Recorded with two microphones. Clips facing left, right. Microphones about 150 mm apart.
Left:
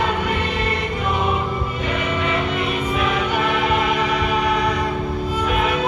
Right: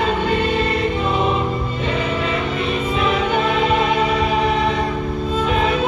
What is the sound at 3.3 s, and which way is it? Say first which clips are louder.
Music: right 2 dB; 25° right (ahead or behind).